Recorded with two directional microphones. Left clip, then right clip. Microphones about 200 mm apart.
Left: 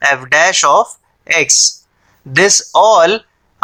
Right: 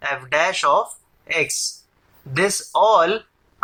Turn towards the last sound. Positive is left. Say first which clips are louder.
# left 7 dB
turn(degrees=40)  # may be behind; listen again after turning